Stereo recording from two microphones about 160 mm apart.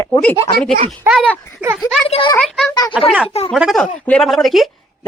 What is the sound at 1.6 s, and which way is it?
Speech, 10° right (ahead or behind).